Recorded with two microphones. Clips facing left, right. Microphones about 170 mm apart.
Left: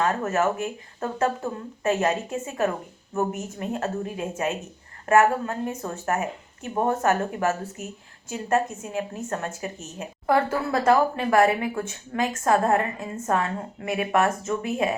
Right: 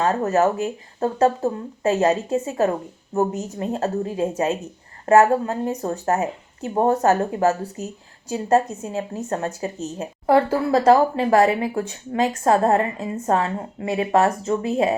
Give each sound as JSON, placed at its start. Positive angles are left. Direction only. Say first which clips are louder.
{"t": 0.0, "sound": "a woman's voice", "louder": "right 4 dB", "side_deg": -25}